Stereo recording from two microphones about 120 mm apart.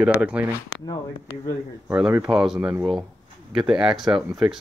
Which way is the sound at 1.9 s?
15° right (ahead or behind).